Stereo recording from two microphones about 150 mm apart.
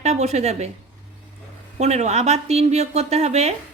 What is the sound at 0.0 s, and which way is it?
Speech, 50° right (ahead or behind).